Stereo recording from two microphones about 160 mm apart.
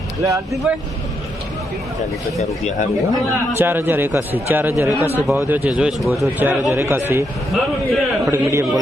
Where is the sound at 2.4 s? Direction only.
45° left (ahead or behind).